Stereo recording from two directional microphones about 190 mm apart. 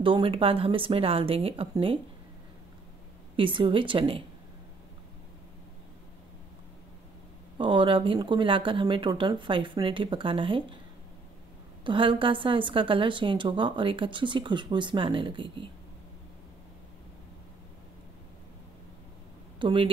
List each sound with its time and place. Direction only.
0.0 s a woman's voice: 25° right (ahead or behind)
3.3 s a woman's voice: 25° right (ahead or behind)
7.5 s a woman's voice: 25° right (ahead or behind)
11.8 s a woman's voice: 25° right (ahead or behind)
19.6 s a woman's voice: 25° right (ahead or behind)